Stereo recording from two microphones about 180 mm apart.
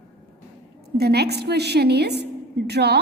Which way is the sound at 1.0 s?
65° right (ahead or behind).